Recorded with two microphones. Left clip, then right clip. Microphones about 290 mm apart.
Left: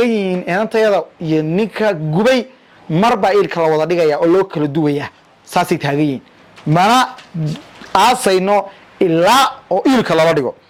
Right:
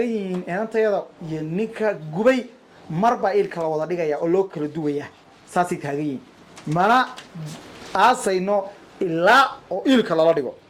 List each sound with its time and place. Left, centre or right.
0.0 s a man's voice: left